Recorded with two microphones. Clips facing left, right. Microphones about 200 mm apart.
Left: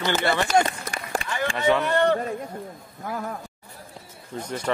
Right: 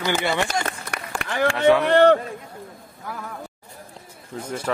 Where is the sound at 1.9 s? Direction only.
65° right (ahead or behind).